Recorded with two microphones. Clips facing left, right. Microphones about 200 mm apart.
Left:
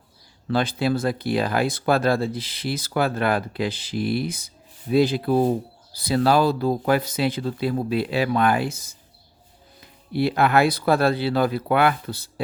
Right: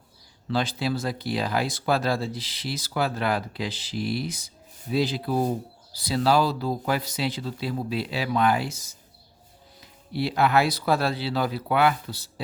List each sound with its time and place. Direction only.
0.4 s speech: 55° left (ahead or behind)
10.1 s speech: 55° left (ahead or behind)